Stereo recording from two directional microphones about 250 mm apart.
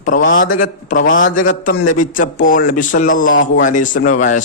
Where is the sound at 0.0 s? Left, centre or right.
Left.